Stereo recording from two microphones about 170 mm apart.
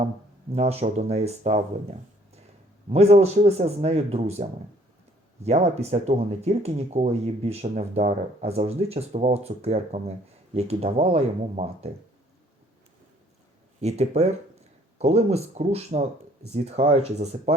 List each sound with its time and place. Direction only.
0.5 s speech: 40° right (ahead or behind)
13.8 s speech: 40° right (ahead or behind)